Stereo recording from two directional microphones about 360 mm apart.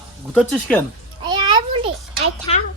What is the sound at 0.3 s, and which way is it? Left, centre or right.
Speech, centre.